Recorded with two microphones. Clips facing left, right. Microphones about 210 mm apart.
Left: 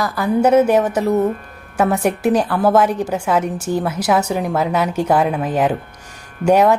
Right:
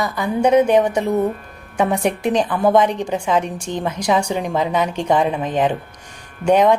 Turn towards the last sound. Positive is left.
turn(degrees=5)  # may be behind; listen again after turning